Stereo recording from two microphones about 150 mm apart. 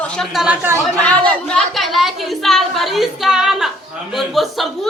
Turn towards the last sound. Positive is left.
turn(degrees=0)  # may be behind; listen again after turning